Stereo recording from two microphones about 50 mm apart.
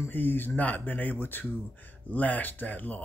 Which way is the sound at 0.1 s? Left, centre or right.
Left.